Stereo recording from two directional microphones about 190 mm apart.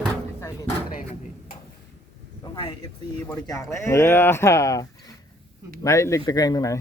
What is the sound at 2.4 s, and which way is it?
Speech, 25° left (ahead or behind).